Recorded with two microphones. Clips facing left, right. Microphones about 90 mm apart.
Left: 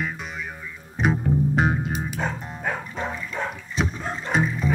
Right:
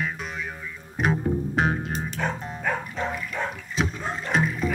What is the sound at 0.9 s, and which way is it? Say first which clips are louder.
Music: left 2 dB; centre (ahead or behind).